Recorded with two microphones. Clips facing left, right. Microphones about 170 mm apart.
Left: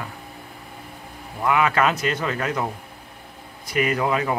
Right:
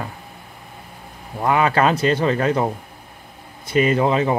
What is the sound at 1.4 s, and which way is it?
Speech, 35° right (ahead or behind).